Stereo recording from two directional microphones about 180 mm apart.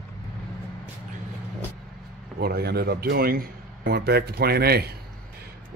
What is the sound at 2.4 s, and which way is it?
Speech, 60° right (ahead or behind).